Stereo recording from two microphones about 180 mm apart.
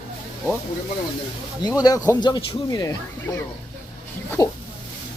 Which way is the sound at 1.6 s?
20° left (ahead or behind).